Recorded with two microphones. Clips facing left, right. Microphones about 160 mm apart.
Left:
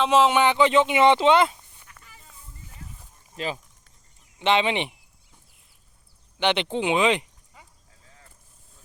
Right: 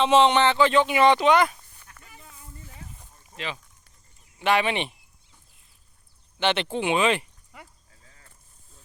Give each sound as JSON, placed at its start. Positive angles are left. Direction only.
{"t": 0.0, "sound": "speech", "side_deg": 0}
{"t": 0.4, "sound": "speech", "side_deg": 20}
{"t": 3.3, "sound": "speech", "side_deg": 40}
{"t": 4.4, "sound": "speech", "side_deg": 20}
{"t": 6.4, "sound": "speech", "side_deg": 15}